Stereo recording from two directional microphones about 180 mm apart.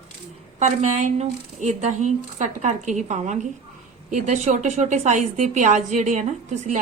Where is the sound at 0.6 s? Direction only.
40° right (ahead or behind).